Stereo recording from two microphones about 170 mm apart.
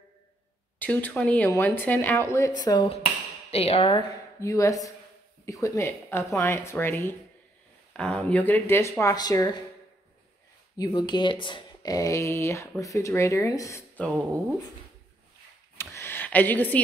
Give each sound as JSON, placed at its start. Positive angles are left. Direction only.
{"t": 0.7, "sound": "speech", "side_deg": 10}
{"t": 4.4, "sound": "speech", "side_deg": 20}
{"t": 10.8, "sound": "speech", "side_deg": 25}
{"t": 15.8, "sound": "a sound", "side_deg": 15}